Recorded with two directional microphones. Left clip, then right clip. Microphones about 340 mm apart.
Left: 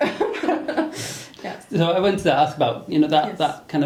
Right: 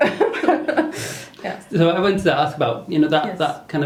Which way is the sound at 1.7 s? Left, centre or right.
Left.